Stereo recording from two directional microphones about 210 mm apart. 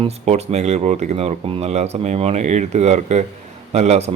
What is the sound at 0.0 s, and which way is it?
A man's voice, 30° right (ahead or behind).